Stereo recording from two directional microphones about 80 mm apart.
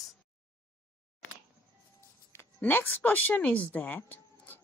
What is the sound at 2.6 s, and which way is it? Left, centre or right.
Speech, left.